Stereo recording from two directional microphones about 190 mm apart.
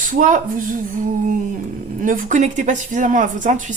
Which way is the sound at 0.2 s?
45° right (ahead or behind).